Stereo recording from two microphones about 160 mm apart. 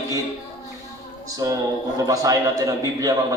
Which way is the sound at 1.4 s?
20° right (ahead or behind).